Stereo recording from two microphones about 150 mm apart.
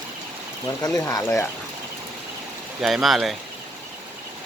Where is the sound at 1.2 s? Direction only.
15° left (ahead or behind).